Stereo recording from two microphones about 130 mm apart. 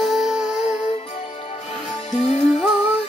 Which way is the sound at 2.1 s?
50° left (ahead or behind).